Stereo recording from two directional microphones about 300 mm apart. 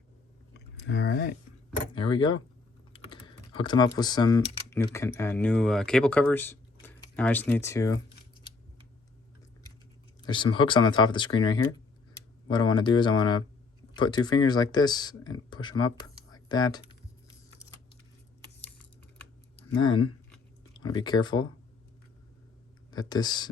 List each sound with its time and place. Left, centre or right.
0.5 s a sound: left
1.9 s speech: centre
10.2 s speech: centre
19.5 s a sound: centre
20.8 s speech: centre
22.9 s speech: centre